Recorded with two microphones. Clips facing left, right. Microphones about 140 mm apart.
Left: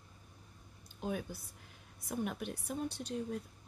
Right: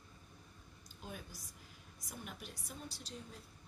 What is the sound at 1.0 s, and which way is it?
A woman's voice, 60° left (ahead or behind).